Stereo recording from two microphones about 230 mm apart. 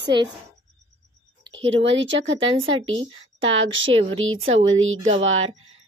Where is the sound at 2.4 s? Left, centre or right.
Right.